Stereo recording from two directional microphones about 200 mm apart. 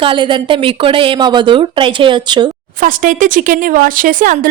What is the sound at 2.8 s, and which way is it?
Speech, 40° right (ahead or behind).